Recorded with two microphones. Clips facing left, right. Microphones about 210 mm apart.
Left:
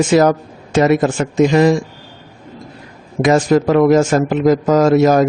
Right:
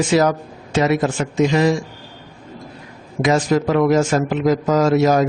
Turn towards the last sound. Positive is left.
turn(degrees=50)  # may be behind; listen again after turning